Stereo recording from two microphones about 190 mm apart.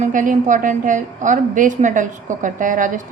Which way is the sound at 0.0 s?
45° right (ahead or behind).